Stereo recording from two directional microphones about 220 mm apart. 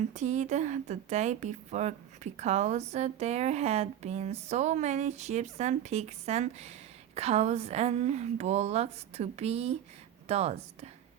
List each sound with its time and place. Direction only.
0.1 s a woman's voice: 30° right (ahead or behind)